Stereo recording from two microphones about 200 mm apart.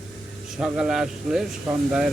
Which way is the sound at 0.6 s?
5° right (ahead or behind).